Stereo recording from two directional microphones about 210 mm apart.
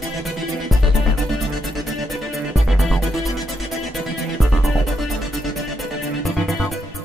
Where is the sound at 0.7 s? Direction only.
Centre (ahead or behind).